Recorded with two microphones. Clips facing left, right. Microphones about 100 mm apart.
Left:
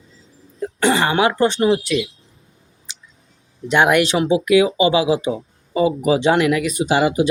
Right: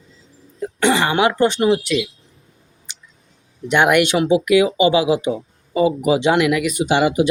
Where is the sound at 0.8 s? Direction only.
35° left (ahead or behind).